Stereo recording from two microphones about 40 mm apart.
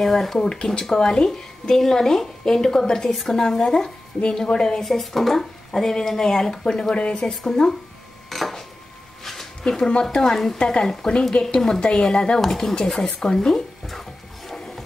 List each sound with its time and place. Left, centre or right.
0.0 s a woman's voice: centre
0.4 s a woman's voice: centre
4.8 s a woman's voice: centre
8.3 s a sound: centre
9.6 s speech: centre
10.3 s a woman's voice: centre
10.6 s a woman's voice: centre